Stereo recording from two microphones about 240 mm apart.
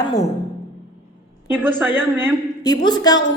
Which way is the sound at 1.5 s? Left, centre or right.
Centre.